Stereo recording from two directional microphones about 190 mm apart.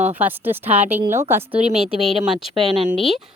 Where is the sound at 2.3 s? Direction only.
30° right (ahead or behind).